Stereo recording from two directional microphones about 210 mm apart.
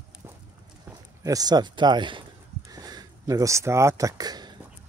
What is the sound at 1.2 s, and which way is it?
Speech, 15° right (ahead or behind).